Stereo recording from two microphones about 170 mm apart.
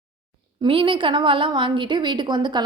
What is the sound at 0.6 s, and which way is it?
A woman's voice, 30° right (ahead or behind).